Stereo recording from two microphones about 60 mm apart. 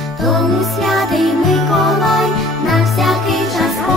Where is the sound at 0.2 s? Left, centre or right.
Centre.